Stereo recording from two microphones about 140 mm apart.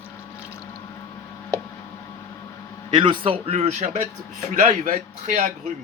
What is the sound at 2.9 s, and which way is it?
A man's voice, 40° right (ahead or behind).